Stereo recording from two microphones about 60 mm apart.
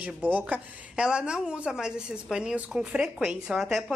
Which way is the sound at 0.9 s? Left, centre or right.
Centre.